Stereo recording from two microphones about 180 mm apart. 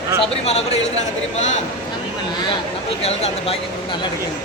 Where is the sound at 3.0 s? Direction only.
35° left (ahead or behind).